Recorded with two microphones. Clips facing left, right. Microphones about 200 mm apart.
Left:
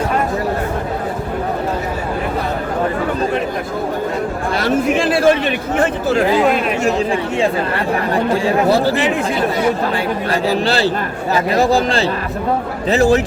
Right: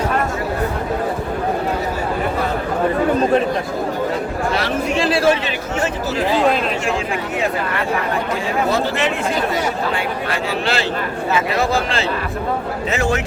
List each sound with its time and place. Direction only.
4.6 s a sound: 50° left (ahead or behind)
6.8 s speech: 30° left (ahead or behind)
10.5 s a man's voice: 35° left (ahead or behind)